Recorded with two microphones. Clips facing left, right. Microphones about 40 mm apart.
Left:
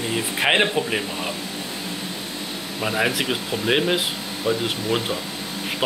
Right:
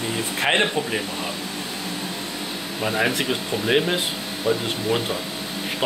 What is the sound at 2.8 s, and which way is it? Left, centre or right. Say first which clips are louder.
Speech: even; centre.